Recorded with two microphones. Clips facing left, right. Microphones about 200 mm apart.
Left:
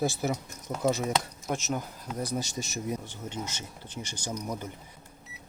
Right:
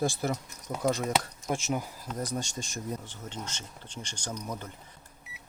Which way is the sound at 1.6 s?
10° right (ahead or behind).